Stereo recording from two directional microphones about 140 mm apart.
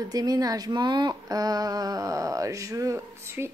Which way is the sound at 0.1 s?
25° right (ahead or behind).